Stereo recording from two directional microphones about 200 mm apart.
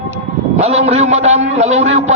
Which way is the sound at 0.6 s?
30° right (ahead or behind).